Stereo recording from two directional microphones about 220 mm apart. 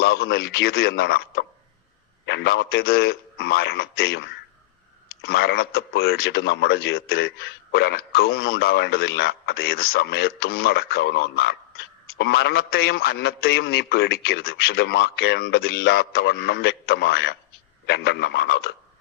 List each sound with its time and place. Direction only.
0.0 s a man's voice: 45° left (ahead or behind)